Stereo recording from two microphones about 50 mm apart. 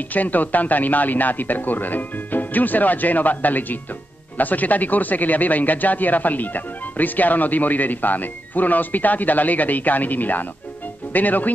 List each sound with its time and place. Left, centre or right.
0.1 s speech: left